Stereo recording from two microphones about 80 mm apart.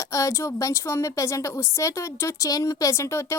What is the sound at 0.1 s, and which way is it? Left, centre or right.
A woman's voice, left.